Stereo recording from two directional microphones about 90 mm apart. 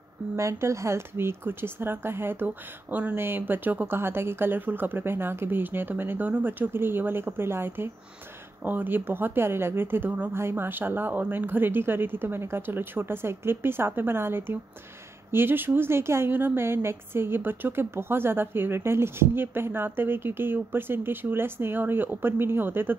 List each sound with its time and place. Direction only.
0.4 s a woman's voice: 35° right (ahead or behind)